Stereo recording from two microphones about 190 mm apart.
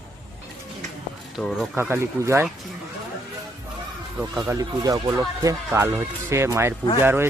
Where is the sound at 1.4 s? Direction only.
Centre (ahead or behind).